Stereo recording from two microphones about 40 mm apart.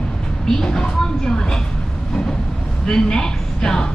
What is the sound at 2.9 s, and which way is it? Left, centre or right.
Speech, centre.